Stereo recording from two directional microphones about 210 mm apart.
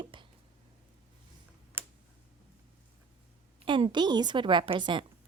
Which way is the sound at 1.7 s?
10° right (ahead or behind).